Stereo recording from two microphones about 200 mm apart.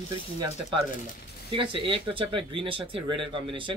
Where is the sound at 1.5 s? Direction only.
25° right (ahead or behind).